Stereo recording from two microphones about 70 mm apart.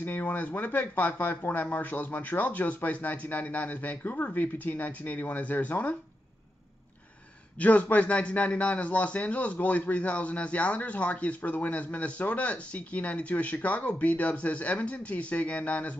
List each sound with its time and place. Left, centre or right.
0.0 s speech: left
7.5 s speech: left